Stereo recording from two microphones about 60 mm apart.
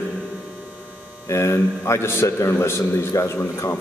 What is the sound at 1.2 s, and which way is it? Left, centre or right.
A man's voice, left.